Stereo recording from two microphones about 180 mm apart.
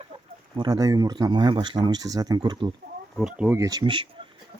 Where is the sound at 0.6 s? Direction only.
20° right (ahead or behind).